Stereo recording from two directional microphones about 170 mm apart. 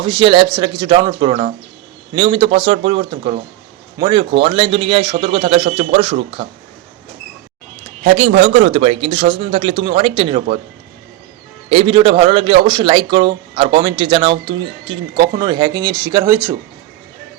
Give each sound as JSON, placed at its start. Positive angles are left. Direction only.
{"t": 0.0, "sound": "a man's voice", "side_deg": -25}
{"t": 8.0, "sound": "a man's voice", "side_deg": -45}
{"t": 11.7, "sound": "speech", "side_deg": -30}